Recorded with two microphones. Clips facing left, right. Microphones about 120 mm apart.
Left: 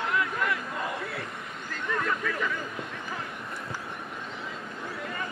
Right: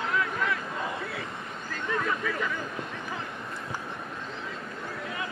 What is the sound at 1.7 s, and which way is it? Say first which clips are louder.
Speech: even; 5° right (ahead or behind).